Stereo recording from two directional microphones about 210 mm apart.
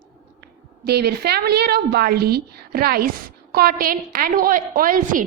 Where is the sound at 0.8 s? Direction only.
50° right (ahead or behind).